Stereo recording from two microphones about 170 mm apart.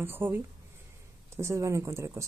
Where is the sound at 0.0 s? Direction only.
15° right (ahead or behind).